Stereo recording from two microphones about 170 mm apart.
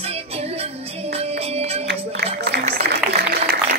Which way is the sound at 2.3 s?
70° right (ahead or behind).